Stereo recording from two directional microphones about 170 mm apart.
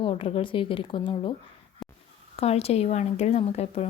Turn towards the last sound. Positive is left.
turn(degrees=40)  # may be behind; listen again after turning